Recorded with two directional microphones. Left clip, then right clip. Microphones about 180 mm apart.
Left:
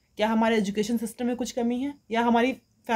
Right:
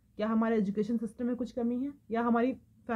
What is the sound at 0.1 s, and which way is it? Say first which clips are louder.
Speech: left 7 dB; 25° left (ahead or behind).